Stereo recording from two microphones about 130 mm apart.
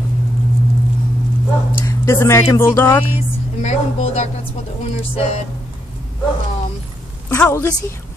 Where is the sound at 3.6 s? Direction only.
55° left (ahead or behind).